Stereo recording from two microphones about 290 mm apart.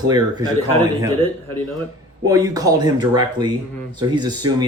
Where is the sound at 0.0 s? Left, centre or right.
Centre.